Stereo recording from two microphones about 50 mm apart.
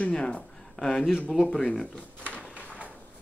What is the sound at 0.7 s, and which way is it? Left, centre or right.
Speech, centre.